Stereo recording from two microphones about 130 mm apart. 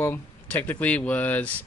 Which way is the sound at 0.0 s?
15° left (ahead or behind).